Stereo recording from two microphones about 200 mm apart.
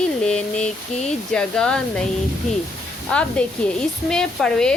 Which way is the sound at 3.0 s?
5° left (ahead or behind).